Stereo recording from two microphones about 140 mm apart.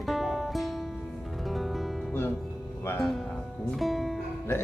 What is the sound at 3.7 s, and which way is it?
Music, centre (ahead or behind).